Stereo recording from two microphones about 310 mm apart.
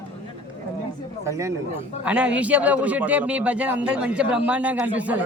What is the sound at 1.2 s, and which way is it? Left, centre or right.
A man's voice, centre.